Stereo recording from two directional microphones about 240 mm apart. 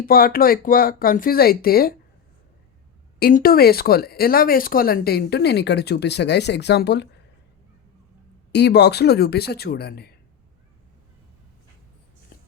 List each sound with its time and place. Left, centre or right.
0.0 s speech: left
3.2 s speech: left
8.5 s speech: left
12.3 s a sound: left